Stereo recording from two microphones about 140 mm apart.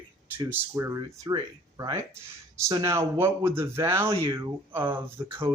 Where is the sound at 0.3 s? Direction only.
15° right (ahead or behind).